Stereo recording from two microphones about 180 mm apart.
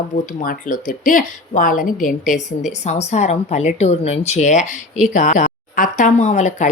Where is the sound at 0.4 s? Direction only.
50° left (ahead or behind).